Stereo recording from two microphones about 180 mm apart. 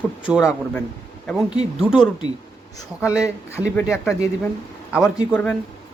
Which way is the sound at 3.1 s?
15° left (ahead or behind).